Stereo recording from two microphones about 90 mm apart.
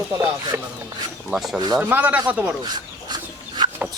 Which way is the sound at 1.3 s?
Centre (ahead or behind).